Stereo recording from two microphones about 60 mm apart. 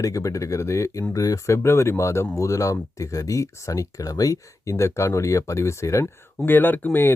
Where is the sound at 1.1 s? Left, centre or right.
Left.